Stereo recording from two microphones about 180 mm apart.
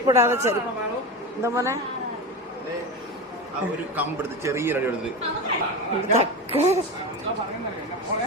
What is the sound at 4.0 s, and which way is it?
Speech, 10° right (ahead or behind).